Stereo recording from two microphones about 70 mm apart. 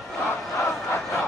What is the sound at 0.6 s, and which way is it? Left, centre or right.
Crowd, left.